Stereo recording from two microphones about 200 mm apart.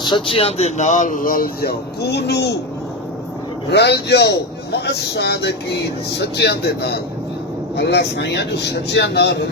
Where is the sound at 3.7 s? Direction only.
55° left (ahead or behind).